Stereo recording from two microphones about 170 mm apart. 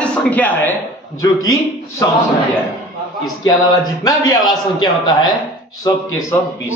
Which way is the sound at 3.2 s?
25° left (ahead or behind).